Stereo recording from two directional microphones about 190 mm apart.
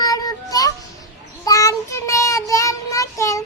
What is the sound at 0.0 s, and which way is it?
Child singing, 20° left (ahead or behind).